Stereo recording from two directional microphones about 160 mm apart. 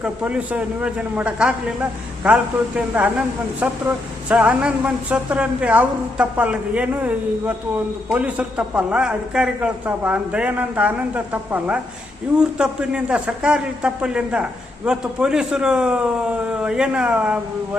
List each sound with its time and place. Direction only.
0.0 s a man's voice: 5° right (ahead or behind)